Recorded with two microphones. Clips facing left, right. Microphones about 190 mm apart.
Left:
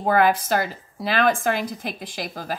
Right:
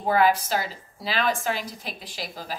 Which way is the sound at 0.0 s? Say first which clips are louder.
Left 2 dB; 55° left (ahead or behind).